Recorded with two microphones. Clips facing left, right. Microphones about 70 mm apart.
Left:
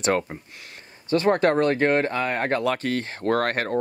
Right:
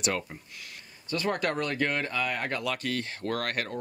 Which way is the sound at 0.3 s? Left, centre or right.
Left.